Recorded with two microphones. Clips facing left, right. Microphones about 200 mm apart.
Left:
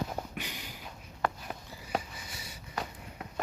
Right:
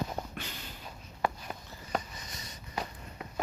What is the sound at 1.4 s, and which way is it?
Sniff, 10° left (ahead or behind).